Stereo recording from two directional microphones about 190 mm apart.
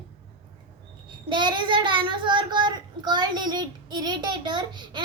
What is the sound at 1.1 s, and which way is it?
A child's voice, 25° right (ahead or behind).